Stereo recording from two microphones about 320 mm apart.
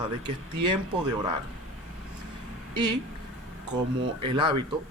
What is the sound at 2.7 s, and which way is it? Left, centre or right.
Speech, centre.